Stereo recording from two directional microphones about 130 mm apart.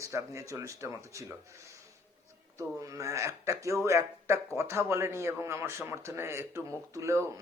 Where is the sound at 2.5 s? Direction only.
25° right (ahead or behind).